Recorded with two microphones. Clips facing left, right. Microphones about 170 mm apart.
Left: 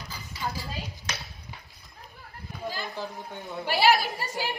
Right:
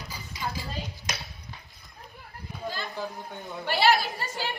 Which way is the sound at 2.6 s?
10° left (ahead or behind).